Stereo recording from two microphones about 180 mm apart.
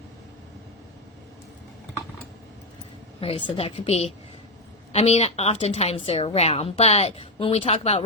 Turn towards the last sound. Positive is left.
turn(degrees=35)  # may be behind; listen again after turning